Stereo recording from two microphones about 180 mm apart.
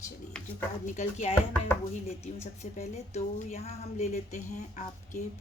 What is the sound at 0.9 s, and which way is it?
A woman's voice, 40° left (ahead or behind).